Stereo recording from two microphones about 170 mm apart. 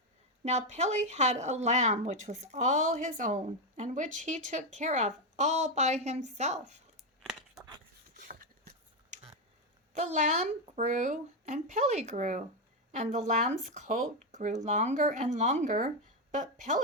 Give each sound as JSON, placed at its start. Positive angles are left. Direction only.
{"t": 0.4, "sound": "speech", "side_deg": -40}
{"t": 7.2, "sound": "tearing", "side_deg": 0}
{"t": 8.3, "sound": "a sound", "side_deg": -55}
{"t": 9.9, "sound": "a woman's voice", "side_deg": -45}